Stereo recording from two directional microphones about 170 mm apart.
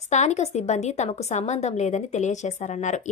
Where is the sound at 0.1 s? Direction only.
45° left (ahead or behind).